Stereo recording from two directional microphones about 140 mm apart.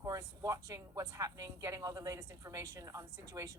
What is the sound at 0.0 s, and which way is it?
Speech, 25° right (ahead or behind).